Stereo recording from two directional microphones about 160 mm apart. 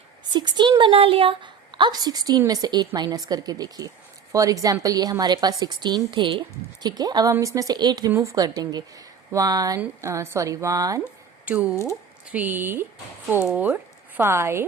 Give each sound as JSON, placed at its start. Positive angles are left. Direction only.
{"t": 0.3, "sound": "a woman's voice", "side_deg": -30}
{"t": 11.4, "sound": "speech", "side_deg": -10}